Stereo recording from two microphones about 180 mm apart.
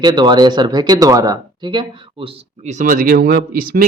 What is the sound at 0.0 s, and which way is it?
Speech, 25° right (ahead or behind).